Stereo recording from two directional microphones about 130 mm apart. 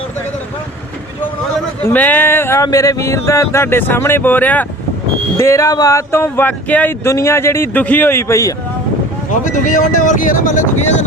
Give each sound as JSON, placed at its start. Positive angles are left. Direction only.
{"t": 1.8, "sound": "speech", "side_deg": 15}
{"t": 5.4, "sound": "speech", "side_deg": 25}
{"t": 9.3, "sound": "speech", "side_deg": 75}